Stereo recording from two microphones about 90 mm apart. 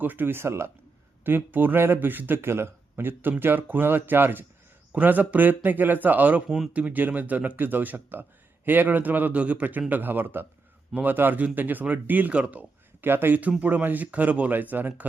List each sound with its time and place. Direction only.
0.0 s speech: 20° right (ahead or behind)